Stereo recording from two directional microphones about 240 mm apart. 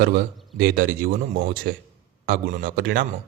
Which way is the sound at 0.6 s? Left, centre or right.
Right.